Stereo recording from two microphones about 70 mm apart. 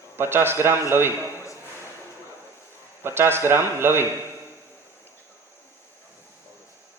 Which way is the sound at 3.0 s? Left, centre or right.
Right.